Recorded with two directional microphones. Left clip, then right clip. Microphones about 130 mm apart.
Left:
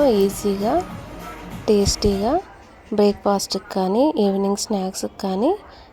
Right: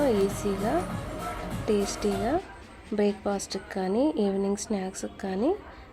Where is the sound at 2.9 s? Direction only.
10° left (ahead or behind).